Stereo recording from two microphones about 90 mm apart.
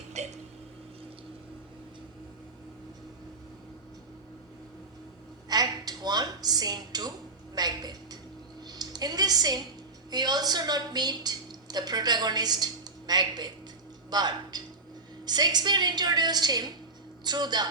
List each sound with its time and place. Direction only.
5.5 s a woman's voice: 45° right (ahead or behind)
8.6 s music: 45° right (ahead or behind)
10.1 s a woman's voice: 50° right (ahead or behind)